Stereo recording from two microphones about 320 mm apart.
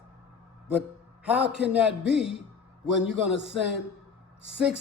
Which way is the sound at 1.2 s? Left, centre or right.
Centre.